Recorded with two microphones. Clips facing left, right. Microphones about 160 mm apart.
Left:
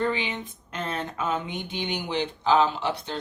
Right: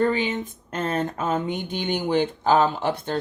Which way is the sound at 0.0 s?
45° right (ahead or behind).